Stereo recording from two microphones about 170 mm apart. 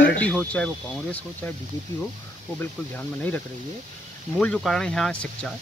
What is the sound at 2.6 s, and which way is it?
Speech, 10° left (ahead or behind).